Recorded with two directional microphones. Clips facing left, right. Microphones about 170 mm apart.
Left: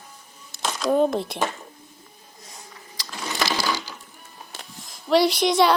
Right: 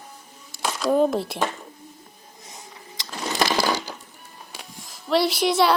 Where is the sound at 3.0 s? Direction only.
25° right (ahead or behind).